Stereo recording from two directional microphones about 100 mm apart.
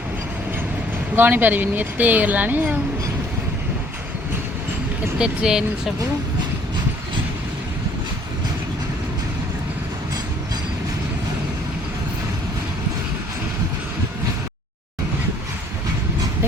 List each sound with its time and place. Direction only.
1.1 s speech: 20° right (ahead or behind)
5.2 s speech: 10° right (ahead or behind)